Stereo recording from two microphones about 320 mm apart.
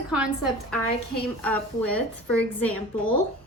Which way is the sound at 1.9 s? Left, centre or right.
Centre.